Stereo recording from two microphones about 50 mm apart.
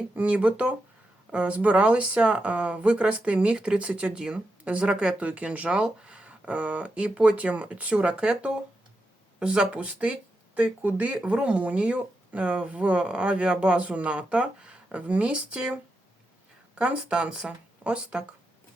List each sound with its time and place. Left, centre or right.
0.2 s speech: right
16.7 s speech: right